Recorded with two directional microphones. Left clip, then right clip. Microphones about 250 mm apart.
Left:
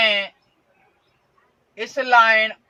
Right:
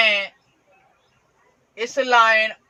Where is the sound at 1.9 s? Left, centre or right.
Centre.